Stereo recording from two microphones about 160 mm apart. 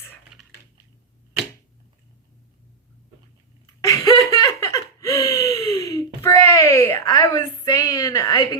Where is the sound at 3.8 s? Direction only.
20° left (ahead or behind).